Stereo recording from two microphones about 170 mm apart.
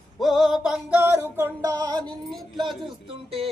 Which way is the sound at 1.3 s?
15° right (ahead or behind).